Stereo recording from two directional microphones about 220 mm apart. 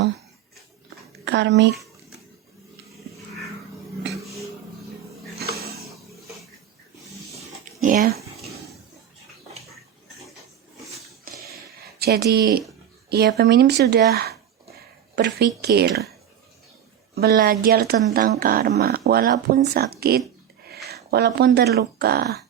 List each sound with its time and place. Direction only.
1.2 s speech: 50° right (ahead or behind)
7.9 s speech: 40° right (ahead or behind)
11.3 s a sound: 40° right (ahead or behind)
11.9 s speech: 45° right (ahead or behind)
17.2 s speech: 45° right (ahead or behind)